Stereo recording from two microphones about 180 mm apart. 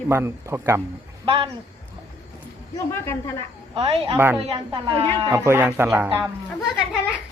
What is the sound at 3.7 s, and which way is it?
Speech, 30° right (ahead or behind).